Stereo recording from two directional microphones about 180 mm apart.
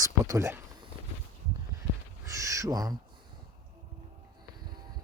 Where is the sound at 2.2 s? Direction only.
15° right (ahead or behind).